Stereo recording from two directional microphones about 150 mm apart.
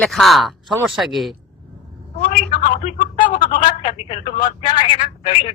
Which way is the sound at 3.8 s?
40° left (ahead or behind).